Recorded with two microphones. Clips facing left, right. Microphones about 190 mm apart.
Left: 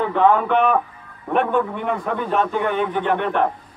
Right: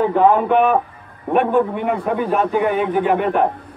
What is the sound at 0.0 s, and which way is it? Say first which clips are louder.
Speech: right 3 dB; 30° right (ahead or behind).